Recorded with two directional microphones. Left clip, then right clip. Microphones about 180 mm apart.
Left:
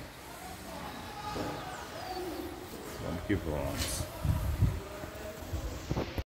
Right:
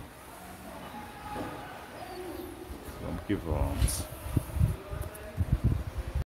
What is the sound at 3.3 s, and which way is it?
Speech, 20° right (ahead or behind).